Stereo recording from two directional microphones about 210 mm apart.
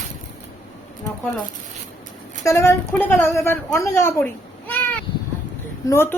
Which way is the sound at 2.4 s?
15° left (ahead or behind).